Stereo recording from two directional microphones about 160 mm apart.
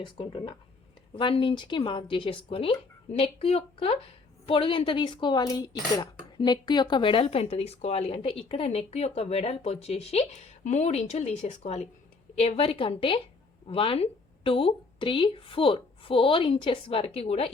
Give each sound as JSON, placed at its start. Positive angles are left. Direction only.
{"t": 0.0, "sound": "a woman's voice", "side_deg": 30}